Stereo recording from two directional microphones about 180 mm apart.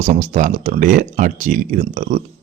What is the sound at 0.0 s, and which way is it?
Speech, 45° right (ahead or behind).